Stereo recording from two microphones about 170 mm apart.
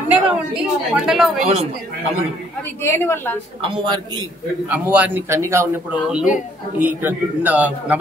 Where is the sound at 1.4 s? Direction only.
40° right (ahead or behind).